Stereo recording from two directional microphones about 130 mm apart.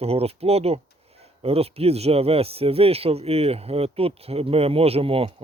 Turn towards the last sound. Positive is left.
turn(degrees=-45)  # may be behind; listen again after turning